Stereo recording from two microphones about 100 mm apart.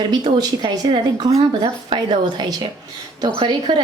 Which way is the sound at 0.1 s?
45° right (ahead or behind).